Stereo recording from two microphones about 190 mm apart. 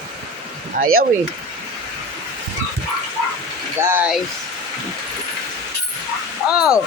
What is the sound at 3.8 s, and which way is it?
Speech, 10° right (ahead or behind).